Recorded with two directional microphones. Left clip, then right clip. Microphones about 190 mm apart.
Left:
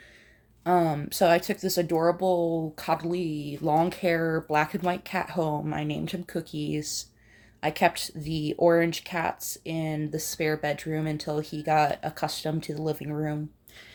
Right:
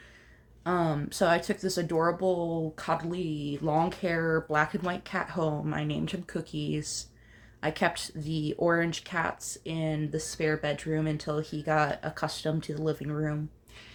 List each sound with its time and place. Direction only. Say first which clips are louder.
0.6 s speech: left 5 dB; 20° left (ahead or behind)